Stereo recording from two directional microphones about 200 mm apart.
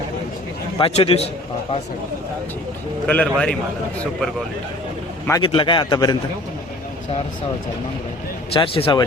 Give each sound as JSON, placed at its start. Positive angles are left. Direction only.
{"t": 0.8, "sound": "a man's voice", "side_deg": 30}
{"t": 3.1, "sound": "a man's voice", "side_deg": 5}
{"t": 5.4, "sound": "a man's voice", "side_deg": 25}
{"t": 8.5, "sound": "a man's voice", "side_deg": 25}